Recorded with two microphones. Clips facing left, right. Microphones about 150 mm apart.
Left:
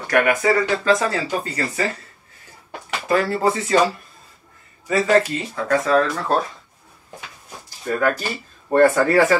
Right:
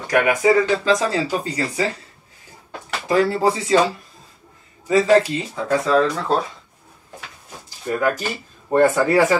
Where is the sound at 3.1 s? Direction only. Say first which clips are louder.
Right 2 dB; 15° right (ahead or behind).